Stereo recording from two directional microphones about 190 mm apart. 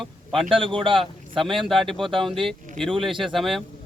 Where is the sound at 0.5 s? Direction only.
25° right (ahead or behind).